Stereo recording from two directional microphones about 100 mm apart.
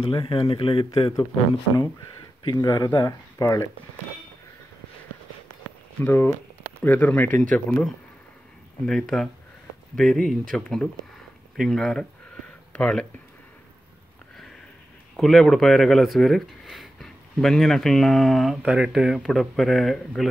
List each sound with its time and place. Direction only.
0.0 s speech: 60° left (ahead or behind)
2.4 s speech: 50° left (ahead or behind)
5.9 s speech: 20° left (ahead or behind)
15.1 s speech: centre (ahead or behind)